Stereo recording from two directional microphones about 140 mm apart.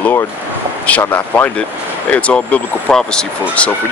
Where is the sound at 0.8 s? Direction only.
10° left (ahead or behind).